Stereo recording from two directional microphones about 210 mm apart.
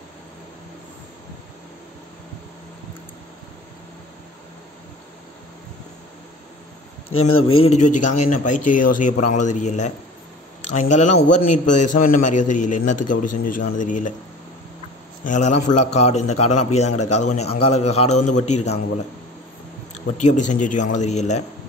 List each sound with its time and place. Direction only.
7.1 s speech: 85° left
7.6 s a man's voice: 35° left (ahead or behind)
15.2 s a man's voice: 35° left (ahead or behind)
16.3 s a man's voice: 90° left
17.2 s a man's voice: 30° left (ahead or behind)
20.2 s a man's voice: 35° left (ahead or behind)